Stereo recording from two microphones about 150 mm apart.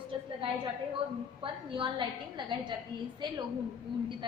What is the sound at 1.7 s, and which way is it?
A woman's voice, 35° right (ahead or behind).